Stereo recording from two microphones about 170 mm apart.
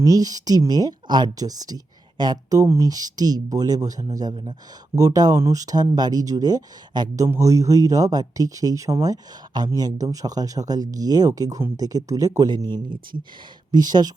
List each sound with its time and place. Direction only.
0.0 s speech: 20° right (ahead or behind)